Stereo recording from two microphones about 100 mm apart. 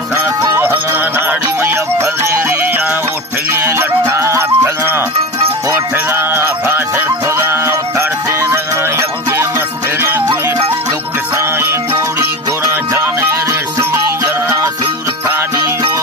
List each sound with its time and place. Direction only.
0.4 s music: 25° right (ahead or behind)
6.1 s music: 20° right (ahead or behind)